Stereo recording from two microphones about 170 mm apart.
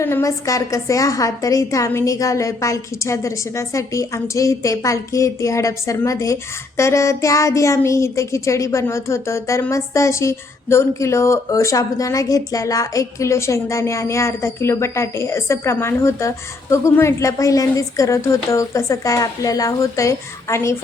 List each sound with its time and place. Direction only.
0.0 s a woman's voice: 15° left (ahead or behind)